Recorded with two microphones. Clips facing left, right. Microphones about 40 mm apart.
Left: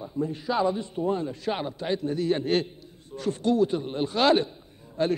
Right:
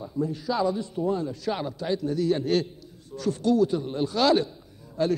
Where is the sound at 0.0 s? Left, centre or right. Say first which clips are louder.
Right 1 dB; left.